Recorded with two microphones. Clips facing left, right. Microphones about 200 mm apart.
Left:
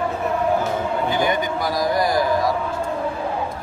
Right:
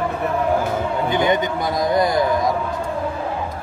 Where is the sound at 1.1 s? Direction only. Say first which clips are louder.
Right 5 dB; 20° right (ahead or behind).